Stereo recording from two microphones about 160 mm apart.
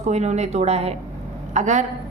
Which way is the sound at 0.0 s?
45° right (ahead or behind).